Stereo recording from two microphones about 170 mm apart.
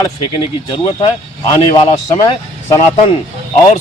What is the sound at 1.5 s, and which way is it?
A man's voice, 25° left (ahead or behind).